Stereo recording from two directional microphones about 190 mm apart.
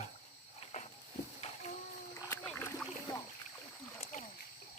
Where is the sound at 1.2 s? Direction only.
40° left (ahead or behind).